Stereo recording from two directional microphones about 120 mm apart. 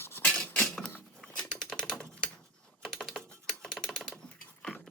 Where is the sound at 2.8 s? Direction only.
Centre (ahead or behind).